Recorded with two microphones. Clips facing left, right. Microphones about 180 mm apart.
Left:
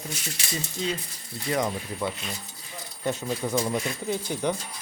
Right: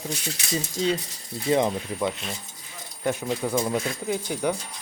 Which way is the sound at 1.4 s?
20° right (ahead or behind).